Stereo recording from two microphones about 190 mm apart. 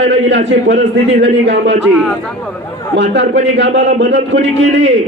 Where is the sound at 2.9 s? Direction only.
65° right (ahead or behind).